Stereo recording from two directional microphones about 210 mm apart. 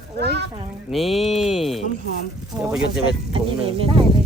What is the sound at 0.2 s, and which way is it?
Speech, 50° right (ahead or behind).